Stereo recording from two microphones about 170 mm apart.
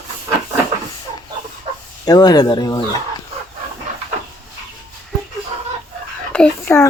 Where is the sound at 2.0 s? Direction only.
25° left (ahead or behind).